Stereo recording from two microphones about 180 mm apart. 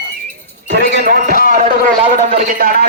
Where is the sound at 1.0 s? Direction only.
55° right (ahead or behind).